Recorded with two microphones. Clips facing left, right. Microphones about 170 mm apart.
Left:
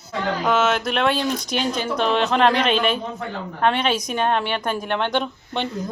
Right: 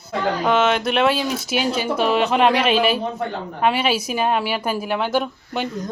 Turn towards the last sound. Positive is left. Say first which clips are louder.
# right 1 dB
turn(degrees=-5)  # may be behind; listen again after turning